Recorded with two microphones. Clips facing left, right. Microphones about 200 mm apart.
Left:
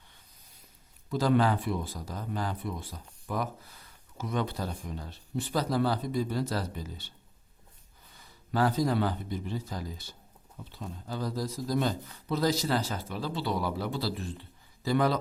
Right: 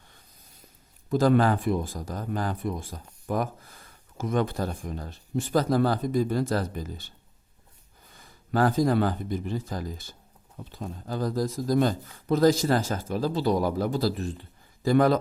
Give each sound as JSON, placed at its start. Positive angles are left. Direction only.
{"t": 1.1, "sound": "speech", "side_deg": -50}
{"t": 8.1, "sound": "speech", "side_deg": -50}